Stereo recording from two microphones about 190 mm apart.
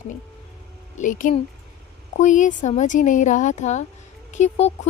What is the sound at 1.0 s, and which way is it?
A woman's voice, 45° left (ahead or behind).